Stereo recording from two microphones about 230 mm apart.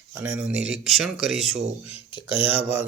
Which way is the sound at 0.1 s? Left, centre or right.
Centre.